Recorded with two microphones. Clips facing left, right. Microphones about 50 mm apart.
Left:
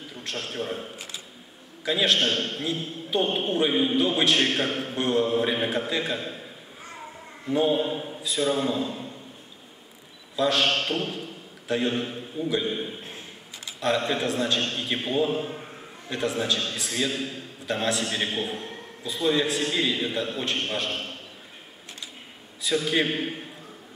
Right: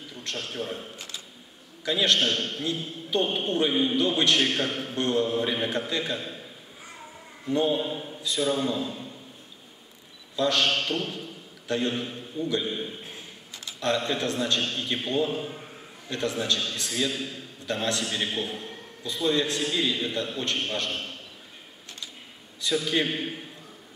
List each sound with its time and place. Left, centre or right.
0.1 s a man's voice: centre
6.9 s a sound: centre
10.3 s a man's voice: centre
22.6 s a man's voice: centre